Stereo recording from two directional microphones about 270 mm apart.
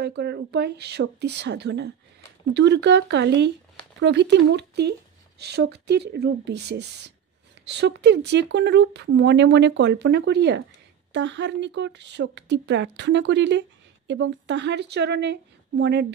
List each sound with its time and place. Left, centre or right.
0.0 s speech: right